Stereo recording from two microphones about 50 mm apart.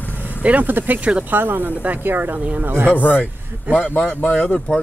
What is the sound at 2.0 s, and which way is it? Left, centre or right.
Speech, right.